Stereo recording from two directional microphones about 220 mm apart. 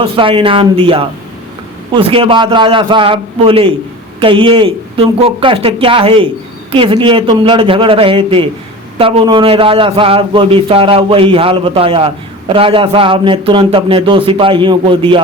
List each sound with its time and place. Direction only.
0.0 s a man's voice: 25° right (ahead or behind)